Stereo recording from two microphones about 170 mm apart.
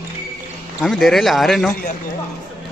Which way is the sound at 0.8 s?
Centre (ahead or behind).